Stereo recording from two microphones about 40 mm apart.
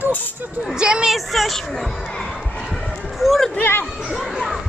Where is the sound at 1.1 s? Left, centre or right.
Centre.